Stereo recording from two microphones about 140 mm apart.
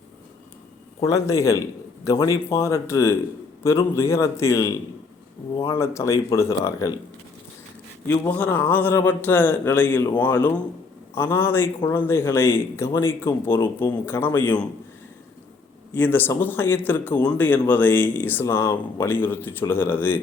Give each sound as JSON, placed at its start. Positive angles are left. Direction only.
{"t": 1.0, "sound": "speech", "side_deg": 20}
{"t": 8.0, "sound": "a man's voice", "side_deg": 15}
{"t": 16.0, "sound": "a man's voice", "side_deg": 15}